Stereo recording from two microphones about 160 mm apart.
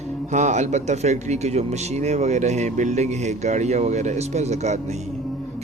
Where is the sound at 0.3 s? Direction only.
50° right (ahead or behind).